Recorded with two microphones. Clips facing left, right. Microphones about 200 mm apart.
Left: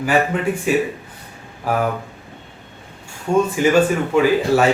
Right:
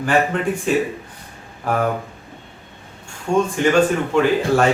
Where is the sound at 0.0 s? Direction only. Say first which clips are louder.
Even; 10° left (ahead or behind).